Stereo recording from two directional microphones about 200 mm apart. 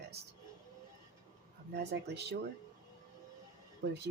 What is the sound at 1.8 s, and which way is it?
Speech, 55° right (ahead or behind).